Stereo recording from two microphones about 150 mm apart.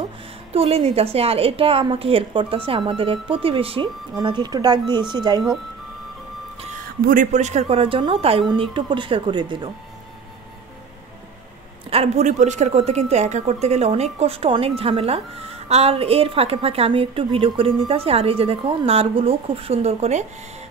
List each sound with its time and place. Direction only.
0.5 s a woman's voice: 40° right (ahead or behind)
7.1 s a woman's voice: 60° right (ahead or behind); by 9.7 s 30° right (ahead or behind)
11.9 s a woman's voice: 45° right (ahead or behind)